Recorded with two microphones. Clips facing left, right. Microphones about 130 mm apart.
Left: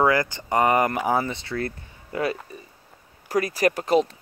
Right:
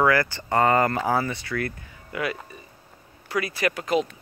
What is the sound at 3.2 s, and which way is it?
Speech, 40° left (ahead or behind).